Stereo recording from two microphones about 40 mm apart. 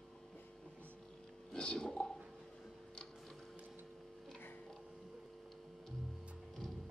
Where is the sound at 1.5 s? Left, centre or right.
Centre.